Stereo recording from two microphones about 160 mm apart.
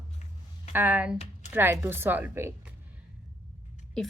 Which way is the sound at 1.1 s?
40° left (ahead or behind).